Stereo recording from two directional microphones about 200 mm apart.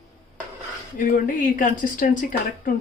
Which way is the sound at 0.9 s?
45° left (ahead or behind).